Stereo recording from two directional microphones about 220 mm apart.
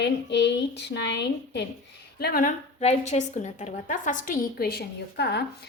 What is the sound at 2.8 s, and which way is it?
A woman's voice, 30° left (ahead or behind).